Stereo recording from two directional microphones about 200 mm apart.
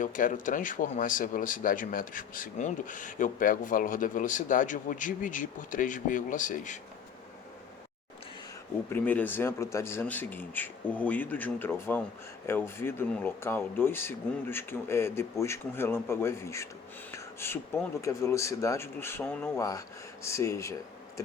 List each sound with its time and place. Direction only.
0.0 s speech: 40° left (ahead or behind)
8.9 s speech: 10° left (ahead or behind)